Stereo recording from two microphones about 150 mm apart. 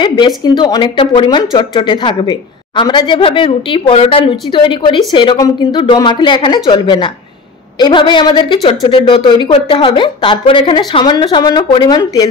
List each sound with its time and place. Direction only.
0.0 s a woman's voice: 30° left (ahead or behind)